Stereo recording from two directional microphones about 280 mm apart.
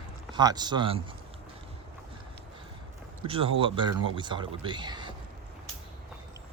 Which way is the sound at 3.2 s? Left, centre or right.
Centre.